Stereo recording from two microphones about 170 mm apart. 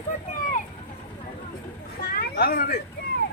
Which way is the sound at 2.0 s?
65° left (ahead or behind).